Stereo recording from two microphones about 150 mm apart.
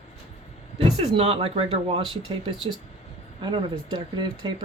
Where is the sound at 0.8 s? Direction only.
40° right (ahead or behind).